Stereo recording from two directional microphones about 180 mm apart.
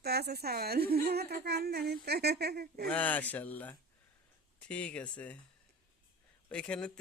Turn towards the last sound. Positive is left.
turn(degrees=5)  # may be behind; listen again after turning